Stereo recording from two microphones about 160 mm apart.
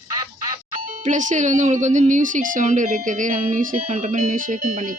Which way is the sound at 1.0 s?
50° right (ahead or behind).